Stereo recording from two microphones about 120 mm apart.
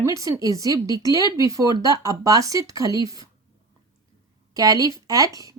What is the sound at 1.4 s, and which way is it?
Speech, 30° right (ahead or behind).